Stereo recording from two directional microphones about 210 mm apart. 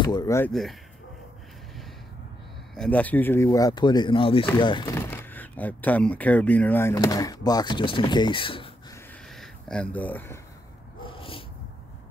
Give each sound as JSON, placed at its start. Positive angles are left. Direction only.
{"t": 0.0, "sound": "speech", "side_deg": 15}
{"t": 0.5, "sound": "speech", "side_deg": 0}
{"t": 2.7, "sound": "speech", "side_deg": 5}
{"t": 9.3, "sound": "speech", "side_deg": 5}
{"t": 11.0, "sound": "dog", "side_deg": 25}